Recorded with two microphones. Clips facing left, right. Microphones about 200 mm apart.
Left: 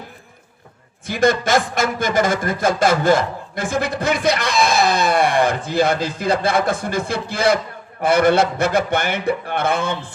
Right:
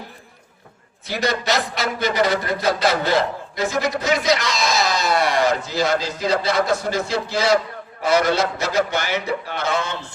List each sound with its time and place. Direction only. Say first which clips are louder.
1.0 s a man's voice: left 5 dB; 50° left (ahead or behind)